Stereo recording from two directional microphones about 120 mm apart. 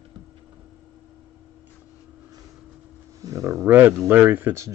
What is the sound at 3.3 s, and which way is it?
Speech, 25° right (ahead or behind).